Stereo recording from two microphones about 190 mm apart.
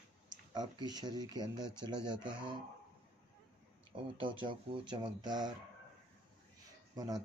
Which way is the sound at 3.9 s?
25° right (ahead or behind).